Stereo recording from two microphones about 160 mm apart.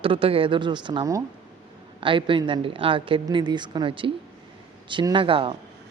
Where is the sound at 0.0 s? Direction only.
35° right (ahead or behind).